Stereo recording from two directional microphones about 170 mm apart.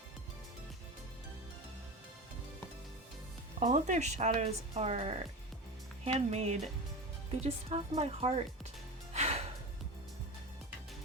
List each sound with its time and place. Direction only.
3.6 s a woman's voice: 45° right (ahead or behind)
9.1 s music: 40° right (ahead or behind)